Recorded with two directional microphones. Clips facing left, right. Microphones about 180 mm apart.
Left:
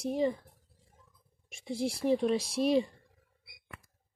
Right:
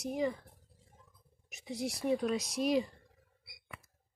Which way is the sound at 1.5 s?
30° left (ahead or behind).